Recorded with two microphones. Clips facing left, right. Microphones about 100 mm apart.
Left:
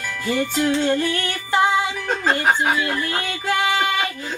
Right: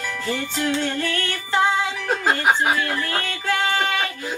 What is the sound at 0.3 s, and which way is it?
Music, 15° left (ahead or behind).